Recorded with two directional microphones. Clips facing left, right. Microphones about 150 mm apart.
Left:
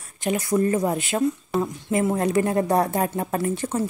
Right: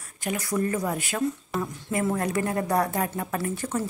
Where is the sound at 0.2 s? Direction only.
25° left (ahead or behind).